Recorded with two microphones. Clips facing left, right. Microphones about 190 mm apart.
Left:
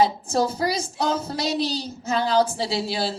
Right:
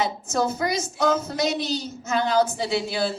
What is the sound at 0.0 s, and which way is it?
A woman's voice, 30° left (ahead or behind).